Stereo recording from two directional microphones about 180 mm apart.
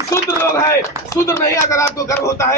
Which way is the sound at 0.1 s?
15° left (ahead or behind).